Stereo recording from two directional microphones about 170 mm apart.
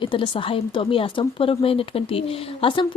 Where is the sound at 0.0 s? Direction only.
30° left (ahead or behind).